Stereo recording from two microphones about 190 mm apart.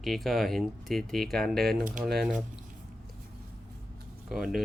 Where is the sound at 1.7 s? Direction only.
50° right (ahead or behind).